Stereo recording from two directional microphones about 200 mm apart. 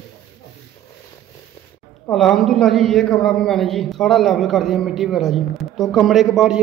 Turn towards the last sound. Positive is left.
turn(degrees=0)  # may be behind; listen again after turning